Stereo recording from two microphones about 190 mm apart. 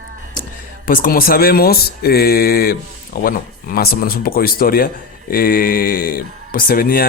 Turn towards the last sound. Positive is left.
turn(degrees=50)  # may be behind; listen again after turning